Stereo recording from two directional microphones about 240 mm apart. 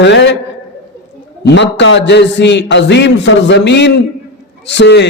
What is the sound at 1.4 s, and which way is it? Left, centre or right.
A man's voice, left.